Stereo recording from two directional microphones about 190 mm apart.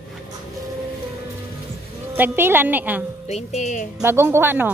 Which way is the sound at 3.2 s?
35° left (ahead or behind).